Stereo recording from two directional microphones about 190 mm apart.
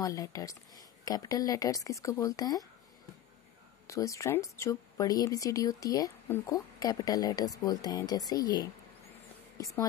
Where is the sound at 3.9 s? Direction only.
15° left (ahead or behind).